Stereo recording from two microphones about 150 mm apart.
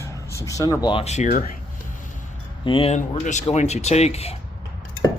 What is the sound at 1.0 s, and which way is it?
Speech, 50° left (ahead or behind).